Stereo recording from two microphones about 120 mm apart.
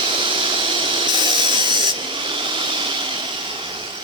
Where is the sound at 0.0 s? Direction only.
45° right (ahead or behind).